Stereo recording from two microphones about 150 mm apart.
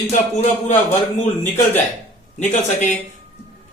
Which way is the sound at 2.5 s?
55° left (ahead or behind).